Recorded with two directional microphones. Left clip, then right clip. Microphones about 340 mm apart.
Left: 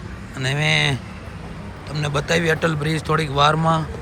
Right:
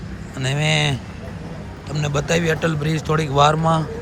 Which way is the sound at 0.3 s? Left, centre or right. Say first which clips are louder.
Left 1 dB; centre.